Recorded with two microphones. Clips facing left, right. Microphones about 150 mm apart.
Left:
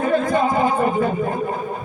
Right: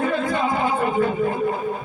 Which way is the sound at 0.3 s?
40° left (ahead or behind).